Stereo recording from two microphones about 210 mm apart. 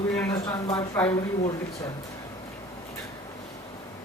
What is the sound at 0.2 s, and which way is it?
Speech, 15° left (ahead or behind).